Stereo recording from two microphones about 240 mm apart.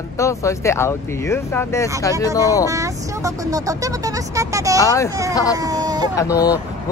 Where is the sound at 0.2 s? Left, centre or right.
Centre.